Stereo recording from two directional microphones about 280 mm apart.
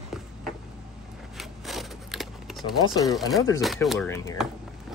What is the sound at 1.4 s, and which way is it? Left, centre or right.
Wood, centre.